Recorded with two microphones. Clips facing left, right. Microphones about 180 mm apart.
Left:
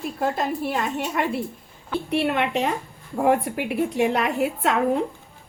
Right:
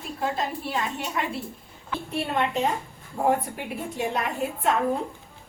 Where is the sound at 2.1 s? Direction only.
75° left (ahead or behind).